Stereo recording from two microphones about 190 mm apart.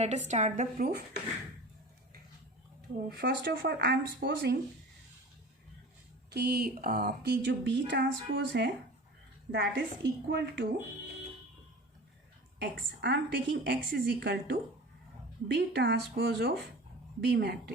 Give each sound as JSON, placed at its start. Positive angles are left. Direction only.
{"t": 0.0, "sound": "a woman's voice", "side_deg": -35}
{"t": 3.1, "sound": "speech", "side_deg": -60}
{"t": 6.3, "sound": "speech", "side_deg": -60}
{"t": 12.5, "sound": "speech", "side_deg": -65}